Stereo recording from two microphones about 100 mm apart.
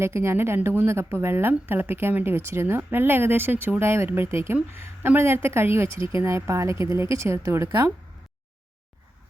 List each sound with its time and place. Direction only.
0.0 s a woman's voice: 25° right (ahead or behind)